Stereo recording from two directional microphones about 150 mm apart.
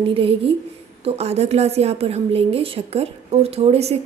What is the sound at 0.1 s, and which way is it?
A woman's voice, 40° right (ahead or behind).